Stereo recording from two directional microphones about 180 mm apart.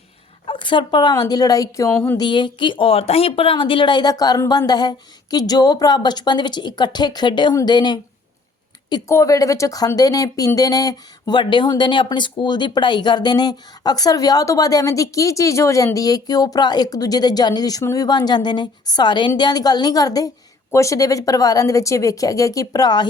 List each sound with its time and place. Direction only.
0.4 s speech: 25° left (ahead or behind)
1.9 s a sound: 5° left (ahead or behind)
2.1 s speech: 25° left (ahead or behind)